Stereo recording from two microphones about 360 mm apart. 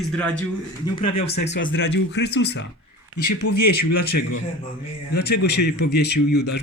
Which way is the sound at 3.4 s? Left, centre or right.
Left.